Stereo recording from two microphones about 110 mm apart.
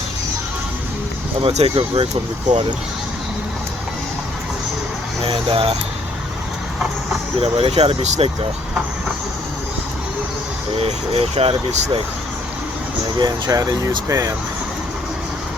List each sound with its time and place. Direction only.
1.4 s speech: 60° right (ahead or behind)
5.2 s speech: 55° right (ahead or behind)
7.4 s speech: 60° right (ahead or behind); by 8.3 s 75° right (ahead or behind)
10.8 s speech: 65° right (ahead or behind)
13.1 s speech: 35° right (ahead or behind)